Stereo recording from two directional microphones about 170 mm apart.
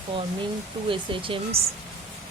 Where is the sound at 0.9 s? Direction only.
30° right (ahead or behind).